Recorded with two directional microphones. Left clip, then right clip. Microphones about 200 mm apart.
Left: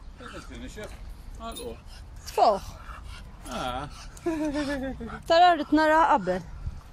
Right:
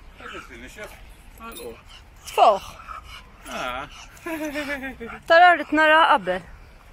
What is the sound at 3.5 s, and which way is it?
Speech, 30° left (ahead or behind).